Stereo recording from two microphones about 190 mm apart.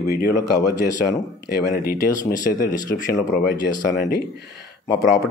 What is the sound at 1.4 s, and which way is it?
Speech, 55° left (ahead or behind).